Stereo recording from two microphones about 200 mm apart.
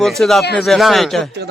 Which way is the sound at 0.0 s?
Centre (ahead or behind).